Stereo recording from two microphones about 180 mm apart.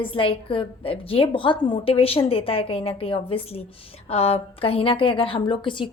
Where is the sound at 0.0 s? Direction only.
30° left (ahead or behind).